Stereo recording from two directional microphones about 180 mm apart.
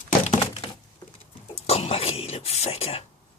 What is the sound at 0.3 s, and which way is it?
Thunk, 35° left (ahead or behind).